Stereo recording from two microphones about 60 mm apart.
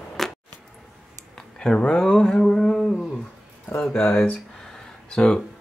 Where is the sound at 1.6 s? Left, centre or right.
Centre.